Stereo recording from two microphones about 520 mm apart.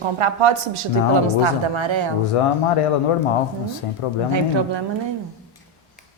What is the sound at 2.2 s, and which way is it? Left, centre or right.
Speech, left.